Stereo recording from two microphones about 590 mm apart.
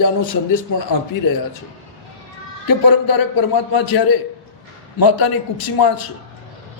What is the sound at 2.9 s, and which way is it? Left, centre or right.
A man's voice, left.